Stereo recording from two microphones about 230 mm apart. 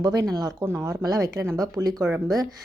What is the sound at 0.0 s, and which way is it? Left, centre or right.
Speech, centre.